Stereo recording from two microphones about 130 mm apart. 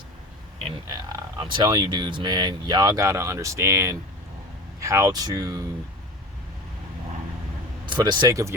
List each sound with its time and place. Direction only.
0.9 s speech: 30° right (ahead or behind)
7.9 s speech: 35° right (ahead or behind)